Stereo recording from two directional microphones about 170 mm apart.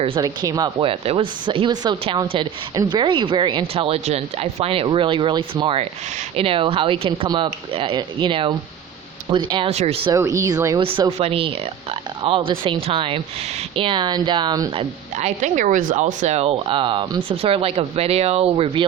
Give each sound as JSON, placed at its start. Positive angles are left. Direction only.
{"t": 0.2, "sound": "speech", "side_deg": -20}
{"t": 10.1, "sound": "speech", "side_deg": -20}
{"t": 10.8, "sound": "speech", "side_deg": -30}
{"t": 15.2, "sound": "speech", "side_deg": -45}